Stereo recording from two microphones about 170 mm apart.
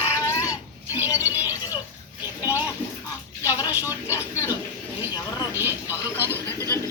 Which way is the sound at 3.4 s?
20° left (ahead or behind).